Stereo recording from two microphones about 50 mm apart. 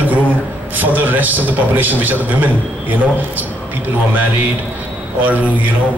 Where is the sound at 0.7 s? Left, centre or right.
Right.